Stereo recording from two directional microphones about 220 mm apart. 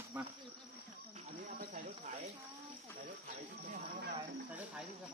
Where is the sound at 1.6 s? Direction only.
40° right (ahead or behind).